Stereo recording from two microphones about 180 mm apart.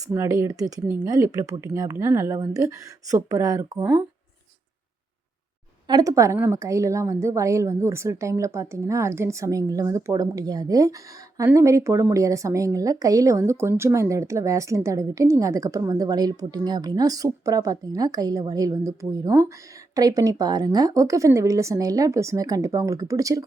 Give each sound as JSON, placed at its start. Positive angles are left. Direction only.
{"t": 0.1, "sound": "a woman's voice", "side_deg": -15}
{"t": 5.9, "sound": "a woman's voice", "side_deg": -20}